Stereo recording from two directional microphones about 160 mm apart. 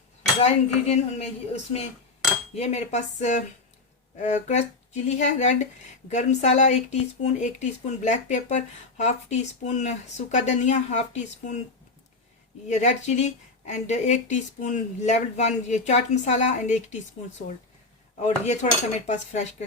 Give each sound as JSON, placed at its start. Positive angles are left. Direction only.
{"t": 0.4, "sound": "speech", "side_deg": 40}
{"t": 2.6, "sound": "speech", "side_deg": 45}
{"t": 12.6, "sound": "speech", "side_deg": 45}
{"t": 18.3, "sound": "speech", "side_deg": 45}